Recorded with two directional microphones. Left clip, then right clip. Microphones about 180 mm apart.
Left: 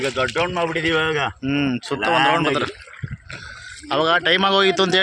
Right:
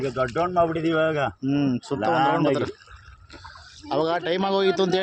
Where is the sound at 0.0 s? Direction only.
50° right (ahead or behind); by 1.3 s 65° right (ahead or behind).